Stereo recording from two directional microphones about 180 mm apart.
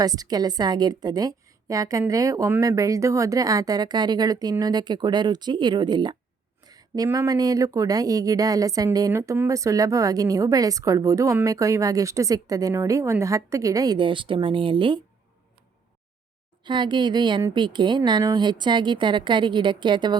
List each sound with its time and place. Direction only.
0.0 s speech: 20° right (ahead or behind)
16.6 s speech: 25° right (ahead or behind)